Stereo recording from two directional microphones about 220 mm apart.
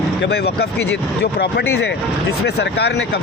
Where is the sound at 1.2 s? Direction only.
50° left (ahead or behind).